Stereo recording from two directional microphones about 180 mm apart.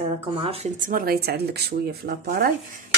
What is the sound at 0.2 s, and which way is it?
Cutlery, 30° right (ahead or behind).